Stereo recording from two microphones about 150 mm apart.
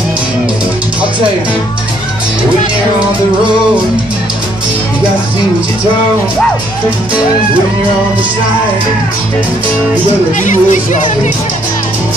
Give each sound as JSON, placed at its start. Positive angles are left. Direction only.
{"t": 10.4, "sound": "speech", "side_deg": 55}